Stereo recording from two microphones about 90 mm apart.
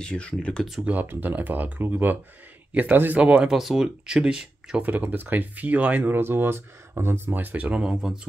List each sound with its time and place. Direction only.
0.0 s speech: 10° left (ahead or behind)
0.8 s speech: 20° right (ahead or behind)